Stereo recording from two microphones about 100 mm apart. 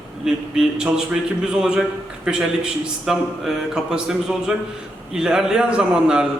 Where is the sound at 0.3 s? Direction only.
5° right (ahead or behind).